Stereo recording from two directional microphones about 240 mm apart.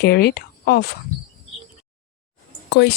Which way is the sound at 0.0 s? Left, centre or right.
Left.